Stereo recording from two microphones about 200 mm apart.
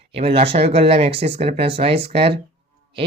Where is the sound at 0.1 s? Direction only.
30° right (ahead or behind).